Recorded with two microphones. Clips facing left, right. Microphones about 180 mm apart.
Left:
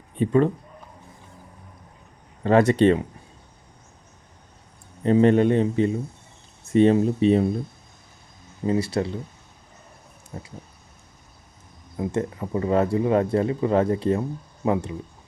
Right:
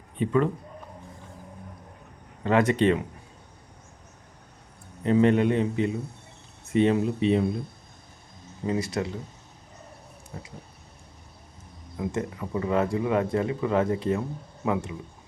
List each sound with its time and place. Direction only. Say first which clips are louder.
0.2 s speech: left 4 dB; 35° left (ahead or behind)
2.4 s speech: left 5 dB; 35° left (ahead or behind)
5.0 s speech: left 3 dB; 35° left (ahead or behind)
8.6 s speech: left 4 dB; 30° left (ahead or behind)
10.3 s speech: left 4 dB; 35° left (ahead or behind)
11.9 s speech: left 4 dB; 30° left (ahead or behind)